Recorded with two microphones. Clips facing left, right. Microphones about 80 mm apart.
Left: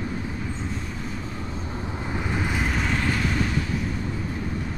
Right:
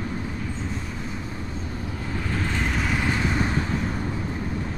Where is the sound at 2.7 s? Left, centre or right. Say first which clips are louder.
Even; centre.